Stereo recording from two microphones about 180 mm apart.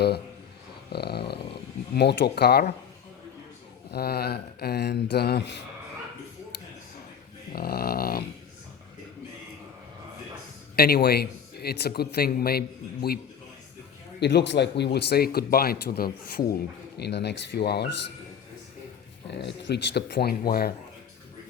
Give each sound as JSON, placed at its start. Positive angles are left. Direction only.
{"t": 0.9, "sound": "dog", "side_deg": 65}
{"t": 2.0, "sound": "a man's voice", "side_deg": 65}
{"t": 3.9, "sound": "a man's voice", "side_deg": 60}
{"t": 7.5, "sound": "a man's voice", "side_deg": 55}
{"t": 10.8, "sound": "a man's voice", "side_deg": 60}
{"t": 14.2, "sound": "a man's voice", "side_deg": 70}
{"t": 17.0, "sound": "a man's voice", "side_deg": 70}
{"t": 19.3, "sound": "speech", "side_deg": 75}